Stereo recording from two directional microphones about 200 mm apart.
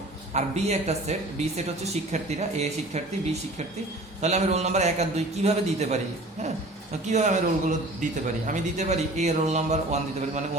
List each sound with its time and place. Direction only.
0.3 s speech: 35° right (ahead or behind)
4.2 s speech: 35° right (ahead or behind)
7.1 s speech: 35° right (ahead or behind)